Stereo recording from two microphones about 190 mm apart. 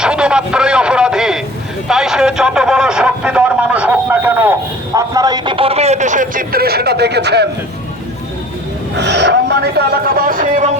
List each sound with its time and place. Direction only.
0.0 s a sound: 5° right (ahead or behind)
4.9 s speech: 20° right (ahead or behind); by 7.4 s 60° right (ahead or behind)
9.0 s a man's voice: 65° right (ahead or behind); by 10.7 s 45° right (ahead or behind)